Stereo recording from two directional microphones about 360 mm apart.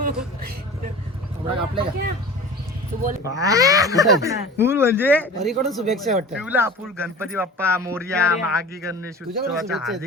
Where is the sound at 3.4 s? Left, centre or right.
Centre.